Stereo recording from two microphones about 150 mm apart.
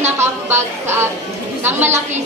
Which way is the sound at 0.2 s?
15° right (ahead or behind).